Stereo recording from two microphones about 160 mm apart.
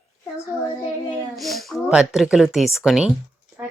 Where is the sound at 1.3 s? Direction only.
Centre (ahead or behind).